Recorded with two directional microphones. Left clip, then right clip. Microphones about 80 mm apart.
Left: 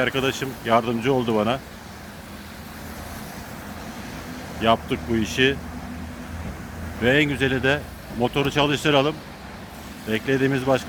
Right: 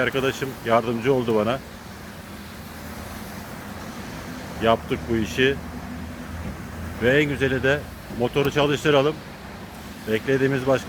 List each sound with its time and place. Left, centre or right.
0.0 s speech: left
4.6 s speech: left
5.2 s speech: left
7.0 s speech: left